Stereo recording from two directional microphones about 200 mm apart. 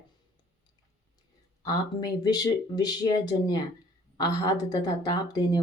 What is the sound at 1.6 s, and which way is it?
Speech, 20° left (ahead or behind).